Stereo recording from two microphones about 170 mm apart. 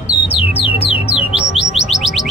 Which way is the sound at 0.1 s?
25° left (ahead or behind).